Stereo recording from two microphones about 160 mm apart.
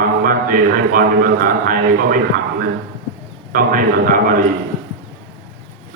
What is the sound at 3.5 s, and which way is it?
Speech, 60° right (ahead or behind).